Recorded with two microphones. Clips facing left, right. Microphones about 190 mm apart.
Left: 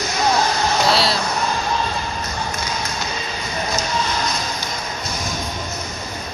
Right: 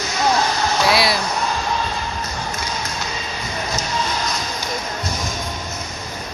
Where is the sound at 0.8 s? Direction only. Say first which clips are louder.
Right 2 dB; 10° right (ahead or behind).